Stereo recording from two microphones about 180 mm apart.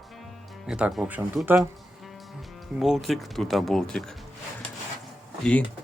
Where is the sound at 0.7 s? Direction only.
5° right (ahead or behind).